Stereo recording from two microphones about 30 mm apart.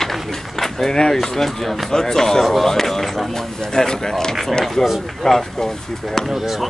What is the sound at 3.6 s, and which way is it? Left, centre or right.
Speech, left.